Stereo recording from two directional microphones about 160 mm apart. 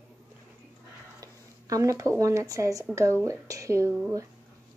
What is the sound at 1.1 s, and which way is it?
Speech, 20° right (ahead or behind).